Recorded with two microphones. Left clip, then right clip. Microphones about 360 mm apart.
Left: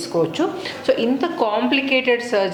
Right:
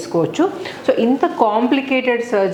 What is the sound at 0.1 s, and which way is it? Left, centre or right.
A woman's voice, right.